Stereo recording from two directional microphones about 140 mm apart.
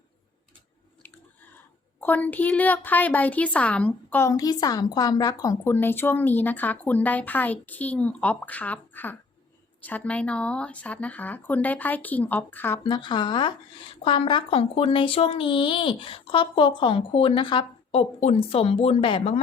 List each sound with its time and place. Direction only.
2.0 s a woman's voice: 10° left (ahead or behind)
12.8 s speech: 30° left (ahead or behind)
18.2 s speech: 45° left (ahead or behind)